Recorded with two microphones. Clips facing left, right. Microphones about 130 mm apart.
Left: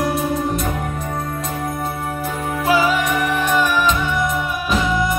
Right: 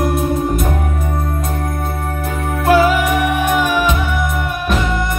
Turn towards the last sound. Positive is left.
turn(degrees=-10)  # may be behind; listen again after turning